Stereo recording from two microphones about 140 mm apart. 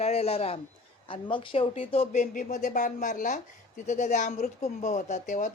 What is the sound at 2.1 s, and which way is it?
Speech, 75° left (ahead or behind).